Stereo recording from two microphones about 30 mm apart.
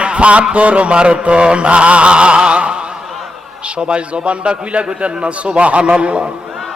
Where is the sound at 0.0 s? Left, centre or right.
Right.